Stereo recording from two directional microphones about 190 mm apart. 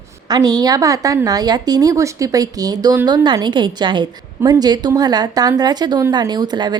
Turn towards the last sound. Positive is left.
turn(degrees=-20)  # may be behind; listen again after turning